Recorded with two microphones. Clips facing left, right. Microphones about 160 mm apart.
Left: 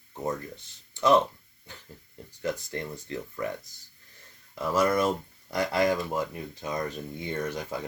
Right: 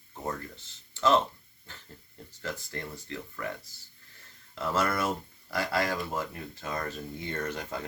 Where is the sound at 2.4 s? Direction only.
20° left (ahead or behind).